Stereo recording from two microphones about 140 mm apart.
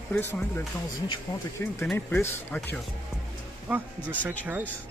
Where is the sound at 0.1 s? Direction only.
15° left (ahead or behind).